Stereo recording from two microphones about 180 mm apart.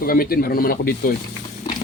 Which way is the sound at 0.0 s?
55° left (ahead or behind).